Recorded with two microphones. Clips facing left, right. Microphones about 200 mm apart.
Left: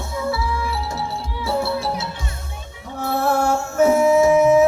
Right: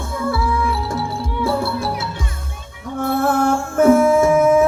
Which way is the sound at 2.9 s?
50° right (ahead or behind).